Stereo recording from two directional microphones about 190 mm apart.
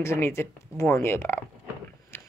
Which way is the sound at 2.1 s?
10° left (ahead or behind).